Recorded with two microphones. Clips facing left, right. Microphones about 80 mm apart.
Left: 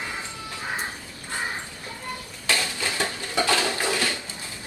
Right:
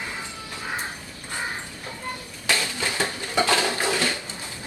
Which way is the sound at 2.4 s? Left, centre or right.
Right.